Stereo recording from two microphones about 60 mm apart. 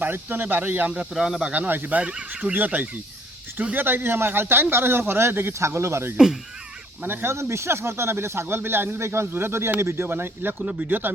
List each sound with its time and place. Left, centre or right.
0.0 s speech: right
1.1 s speech: centre
1.5 s speech: right
2.0 s speech: right
10.6 s speech: centre
10.8 s speech: right